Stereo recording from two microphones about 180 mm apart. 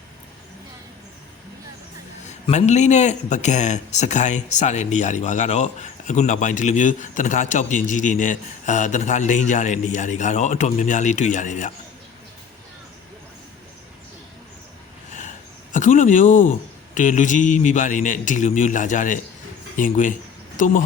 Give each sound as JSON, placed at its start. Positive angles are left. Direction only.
{"t": 2.2, "sound": "a man's voice", "side_deg": 40}
{"t": 15.7, "sound": "a man's voice", "side_deg": 45}